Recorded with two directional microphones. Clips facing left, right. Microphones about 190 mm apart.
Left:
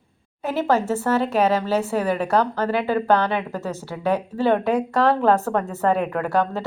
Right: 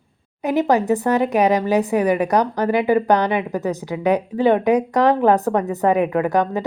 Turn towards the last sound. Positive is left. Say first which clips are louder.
# right 4 dB
turn(degrees=-15)  # may be behind; listen again after turning